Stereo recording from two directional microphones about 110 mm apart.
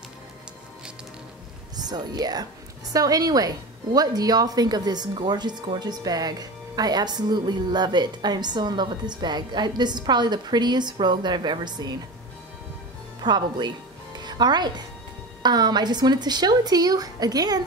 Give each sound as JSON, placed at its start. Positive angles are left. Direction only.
{"t": 1.8, "sound": "a woman's voice", "side_deg": -40}
{"t": 13.2, "sound": "music", "side_deg": -40}
{"t": 15.4, "sound": "a woman's voice", "side_deg": -40}